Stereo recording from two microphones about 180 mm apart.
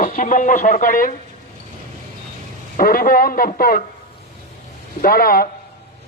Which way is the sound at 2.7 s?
50° left (ahead or behind).